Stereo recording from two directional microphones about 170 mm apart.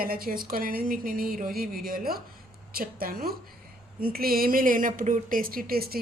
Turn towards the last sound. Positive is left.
turn(degrees=-60)  # may be behind; listen again after turning